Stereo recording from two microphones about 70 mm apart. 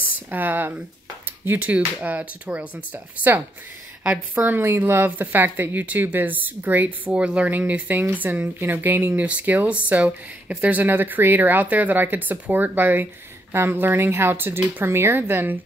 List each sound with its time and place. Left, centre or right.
0.3 s speech: right
4.0 s a woman's voice: centre
4.5 s speech: right
9.2 s speech: centre